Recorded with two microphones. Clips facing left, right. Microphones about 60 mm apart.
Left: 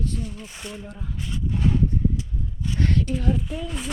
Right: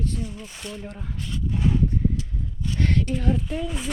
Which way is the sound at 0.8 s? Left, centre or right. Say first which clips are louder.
Right 1 dB; right.